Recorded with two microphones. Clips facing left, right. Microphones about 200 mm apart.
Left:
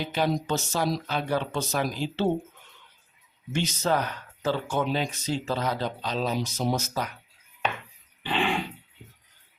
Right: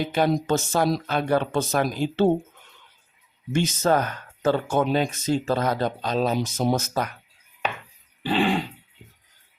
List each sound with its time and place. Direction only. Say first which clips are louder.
0.0 s speech: right 4 dB; 50° right (ahead or behind)
3.5 s speech: right 5 dB; 50° right (ahead or behind)
8.2 s dog: right 5 dB; 35° right (ahead or behind)